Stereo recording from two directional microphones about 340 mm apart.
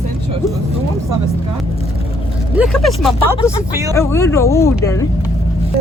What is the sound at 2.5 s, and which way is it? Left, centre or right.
Speech, centre.